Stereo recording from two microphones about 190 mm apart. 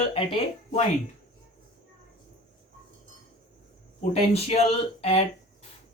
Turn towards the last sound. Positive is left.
turn(degrees=30)  # may be behind; listen again after turning